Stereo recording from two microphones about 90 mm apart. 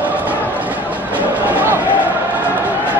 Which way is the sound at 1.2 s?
20° right (ahead or behind).